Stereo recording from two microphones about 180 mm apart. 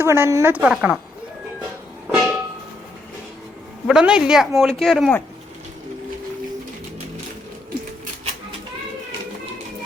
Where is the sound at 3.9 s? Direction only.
5° right (ahead or behind).